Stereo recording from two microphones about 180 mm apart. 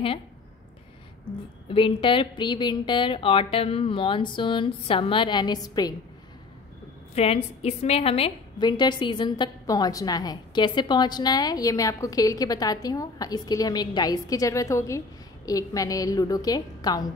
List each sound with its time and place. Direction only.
1.7 s a woman's voice: 30° left (ahead or behind)
7.2 s a woman's voice: 35° left (ahead or behind)